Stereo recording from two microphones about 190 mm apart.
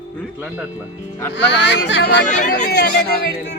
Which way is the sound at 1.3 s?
70° left (ahead or behind).